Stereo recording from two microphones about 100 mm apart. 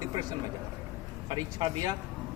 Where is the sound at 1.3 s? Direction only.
40° right (ahead or behind).